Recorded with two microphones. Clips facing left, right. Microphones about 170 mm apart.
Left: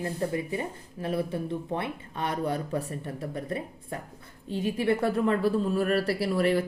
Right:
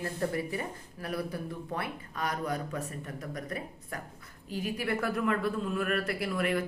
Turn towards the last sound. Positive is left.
turn(degrees=35)  # may be behind; listen again after turning